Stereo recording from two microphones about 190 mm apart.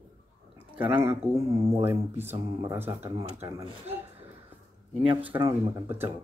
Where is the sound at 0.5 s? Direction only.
10° right (ahead or behind).